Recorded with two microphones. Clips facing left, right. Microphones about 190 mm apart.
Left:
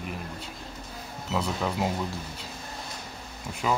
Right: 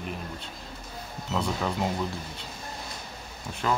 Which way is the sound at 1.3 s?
5° left (ahead or behind).